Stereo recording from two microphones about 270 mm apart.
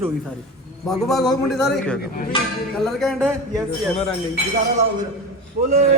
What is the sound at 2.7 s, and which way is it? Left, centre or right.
Speech, centre.